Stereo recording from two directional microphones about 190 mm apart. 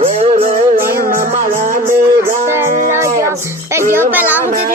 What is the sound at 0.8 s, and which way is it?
Music, 50° right (ahead or behind).